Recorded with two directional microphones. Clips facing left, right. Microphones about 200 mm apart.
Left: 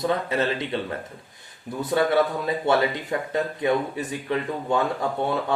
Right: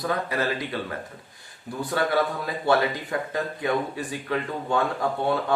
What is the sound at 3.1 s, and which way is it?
Speech, 20° left (ahead or behind).